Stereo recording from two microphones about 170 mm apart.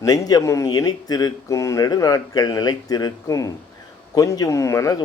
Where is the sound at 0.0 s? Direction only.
20° left (ahead or behind).